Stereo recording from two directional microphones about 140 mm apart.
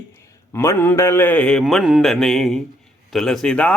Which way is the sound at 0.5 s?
20° left (ahead or behind).